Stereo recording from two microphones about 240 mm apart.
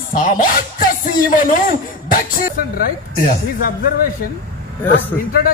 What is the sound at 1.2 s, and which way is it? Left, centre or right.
Speech, left.